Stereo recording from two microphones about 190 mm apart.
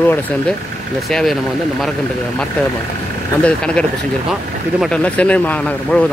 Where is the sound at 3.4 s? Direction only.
5° left (ahead or behind).